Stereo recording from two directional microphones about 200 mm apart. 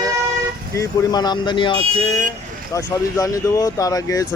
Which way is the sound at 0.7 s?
15° left (ahead or behind).